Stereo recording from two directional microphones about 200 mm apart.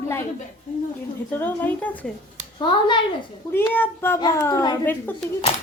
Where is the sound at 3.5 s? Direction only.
10° left (ahead or behind).